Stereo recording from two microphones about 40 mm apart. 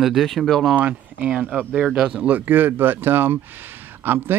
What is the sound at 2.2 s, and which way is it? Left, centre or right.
Speech, right.